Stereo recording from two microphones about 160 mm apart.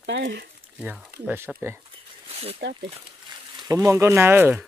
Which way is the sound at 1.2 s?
15° right (ahead or behind).